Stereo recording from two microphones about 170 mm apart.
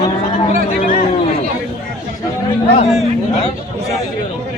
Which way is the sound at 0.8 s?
45° left (ahead or behind).